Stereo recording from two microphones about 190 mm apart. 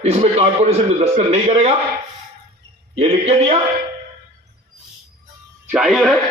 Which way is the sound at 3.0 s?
35° right (ahead or behind).